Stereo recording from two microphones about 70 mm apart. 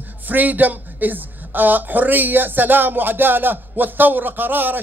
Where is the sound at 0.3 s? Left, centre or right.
Right.